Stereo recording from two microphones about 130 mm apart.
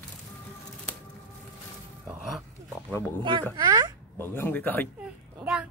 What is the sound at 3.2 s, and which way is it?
Speech, 35° right (ahead or behind).